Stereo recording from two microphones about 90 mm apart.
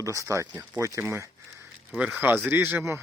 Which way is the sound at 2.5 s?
25° right (ahead or behind).